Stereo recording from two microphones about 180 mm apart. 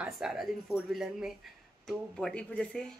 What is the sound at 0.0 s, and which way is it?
Speech, 5° right (ahead or behind).